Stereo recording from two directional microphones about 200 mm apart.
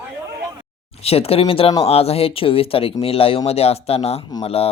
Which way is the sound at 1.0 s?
30° left (ahead or behind).